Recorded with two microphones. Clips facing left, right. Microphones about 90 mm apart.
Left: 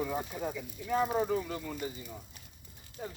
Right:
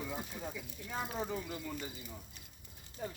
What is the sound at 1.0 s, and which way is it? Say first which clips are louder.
Speech: left 7 dB; 40° left (ahead or behind).